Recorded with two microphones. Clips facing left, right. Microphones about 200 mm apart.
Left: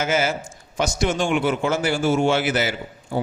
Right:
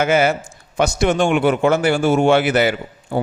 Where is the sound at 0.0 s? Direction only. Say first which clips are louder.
Right 6 dB; 60° right (ahead or behind).